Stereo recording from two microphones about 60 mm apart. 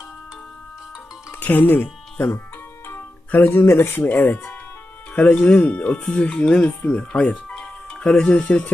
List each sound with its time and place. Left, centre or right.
1.4 s speech: left